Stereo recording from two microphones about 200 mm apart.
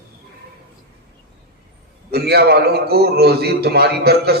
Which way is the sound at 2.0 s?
50° right (ahead or behind).